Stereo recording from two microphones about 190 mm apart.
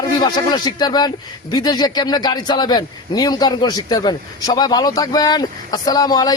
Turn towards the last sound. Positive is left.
turn(degrees=20)  # may be behind; listen again after turning